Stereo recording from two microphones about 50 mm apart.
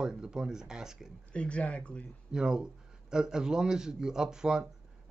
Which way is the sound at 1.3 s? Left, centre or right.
Left.